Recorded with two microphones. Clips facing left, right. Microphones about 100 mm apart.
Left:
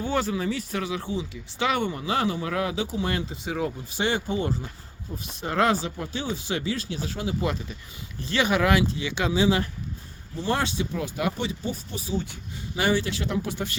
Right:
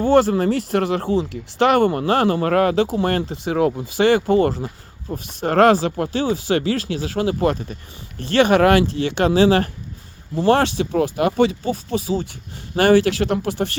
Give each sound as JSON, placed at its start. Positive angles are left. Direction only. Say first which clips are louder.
{"t": 0.0, "sound": "speech", "louder": "right 11 dB", "side_deg": -70}
{"t": 7.3, "sound": "speech", "louder": "right 8 dB", "side_deg": -50}
{"t": 8.2, "sound": "speech", "louder": "right 9 dB", "side_deg": -65}
{"t": 10.3, "sound": "speech", "louder": "right 10 dB", "side_deg": -85}
{"t": 12.7, "sound": "speech", "louder": "right 10 dB", "side_deg": -75}